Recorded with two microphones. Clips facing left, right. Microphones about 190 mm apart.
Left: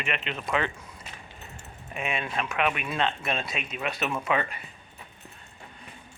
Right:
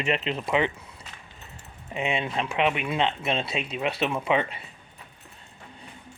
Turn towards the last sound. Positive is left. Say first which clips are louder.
# right 3 dB
turn(degrees=-25)  # may be behind; listen again after turning